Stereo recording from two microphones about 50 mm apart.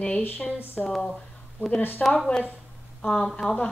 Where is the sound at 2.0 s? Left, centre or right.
Centre.